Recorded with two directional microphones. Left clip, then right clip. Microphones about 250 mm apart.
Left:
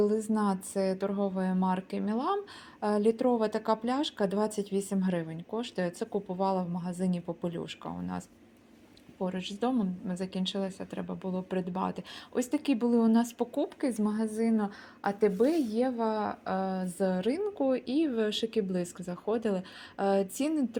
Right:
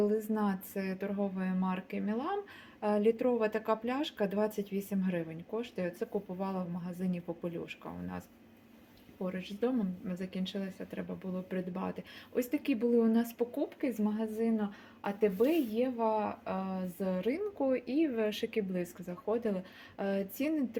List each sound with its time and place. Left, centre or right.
0.0 s a woman's voice: left
17.7 s speech: centre
18.1 s a woman's voice: left